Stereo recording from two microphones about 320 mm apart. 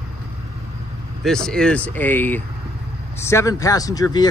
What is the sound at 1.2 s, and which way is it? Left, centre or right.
Speech, centre.